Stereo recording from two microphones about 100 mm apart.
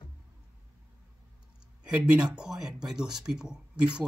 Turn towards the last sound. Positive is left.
turn(degrees=-10)  # may be behind; listen again after turning